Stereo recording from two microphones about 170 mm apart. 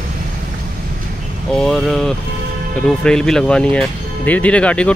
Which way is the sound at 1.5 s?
Centre (ahead or behind).